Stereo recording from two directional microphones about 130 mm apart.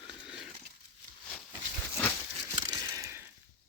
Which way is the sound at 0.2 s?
5° right (ahead or behind).